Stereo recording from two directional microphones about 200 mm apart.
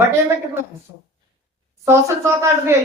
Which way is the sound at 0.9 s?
20° right (ahead or behind).